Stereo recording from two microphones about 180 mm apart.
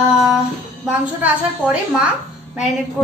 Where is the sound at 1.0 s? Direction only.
5° right (ahead or behind).